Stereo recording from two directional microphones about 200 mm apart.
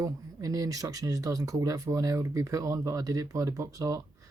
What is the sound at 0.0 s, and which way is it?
Speech, 15° right (ahead or behind).